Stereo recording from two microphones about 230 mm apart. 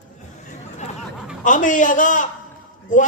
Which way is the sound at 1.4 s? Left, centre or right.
Left.